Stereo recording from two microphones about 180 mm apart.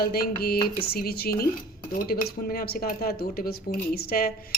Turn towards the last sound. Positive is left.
turn(degrees=55)  # may be behind; listen again after turning